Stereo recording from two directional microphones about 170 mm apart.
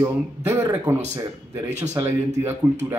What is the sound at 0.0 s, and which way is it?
Speech, 15° right (ahead or behind).